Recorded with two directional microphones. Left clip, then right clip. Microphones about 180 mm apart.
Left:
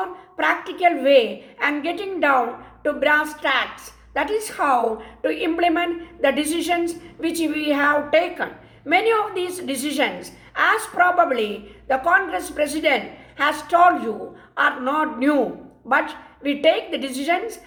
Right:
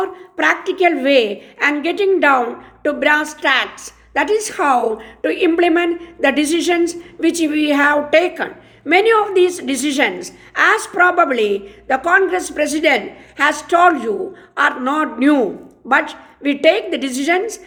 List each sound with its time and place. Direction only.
0.0 s a woman's voice: 40° right (ahead or behind)